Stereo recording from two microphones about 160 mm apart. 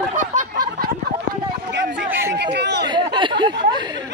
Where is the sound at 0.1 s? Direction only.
55° right (ahead or behind).